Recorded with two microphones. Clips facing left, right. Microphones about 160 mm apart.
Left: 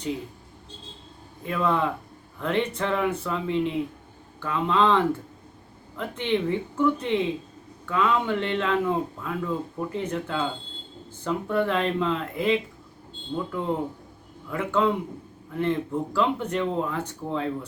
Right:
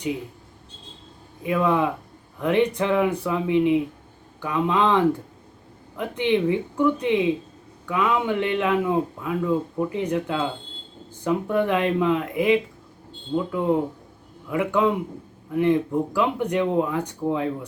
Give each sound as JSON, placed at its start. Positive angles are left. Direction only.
{"t": 1.5, "sound": "speech", "side_deg": -15}